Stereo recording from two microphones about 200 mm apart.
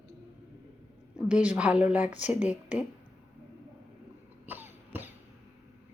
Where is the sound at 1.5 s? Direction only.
5° right (ahead or behind).